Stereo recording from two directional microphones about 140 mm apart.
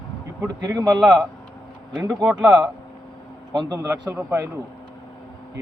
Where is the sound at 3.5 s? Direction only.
30° right (ahead or behind).